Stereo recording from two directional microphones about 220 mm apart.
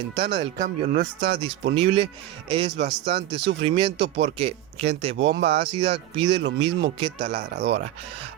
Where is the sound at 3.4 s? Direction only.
55° right (ahead or behind).